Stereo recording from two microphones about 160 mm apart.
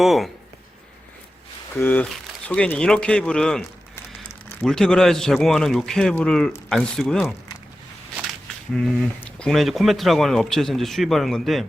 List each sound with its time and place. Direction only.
0.0 s speech: centre (ahead or behind)
1.7 s speech: 10° left (ahead or behind)
8.7 s speech: 5° left (ahead or behind)